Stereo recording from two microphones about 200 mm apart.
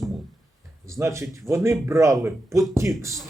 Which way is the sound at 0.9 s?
15° right (ahead or behind).